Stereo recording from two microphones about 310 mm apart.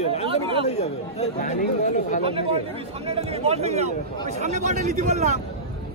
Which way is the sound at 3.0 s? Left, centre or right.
Centre.